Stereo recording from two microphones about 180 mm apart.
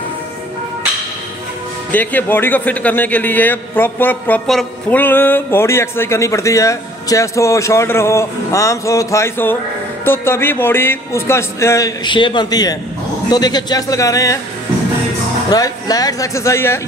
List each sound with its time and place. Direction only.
1.9 s a man's voice: 10° left (ahead or behind)
15.5 s a man's voice: 20° left (ahead or behind)